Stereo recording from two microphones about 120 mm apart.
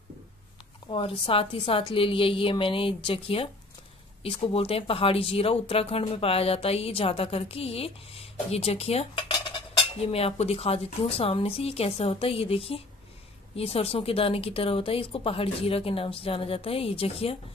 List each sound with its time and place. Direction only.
0.8 s a woman's voice: 45° left (ahead or behind)